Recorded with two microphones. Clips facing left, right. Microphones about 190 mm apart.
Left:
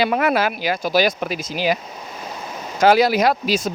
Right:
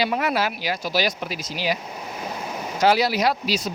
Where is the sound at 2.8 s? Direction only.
50° left (ahead or behind).